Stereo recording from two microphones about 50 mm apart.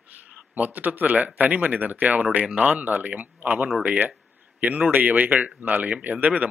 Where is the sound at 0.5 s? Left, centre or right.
Right.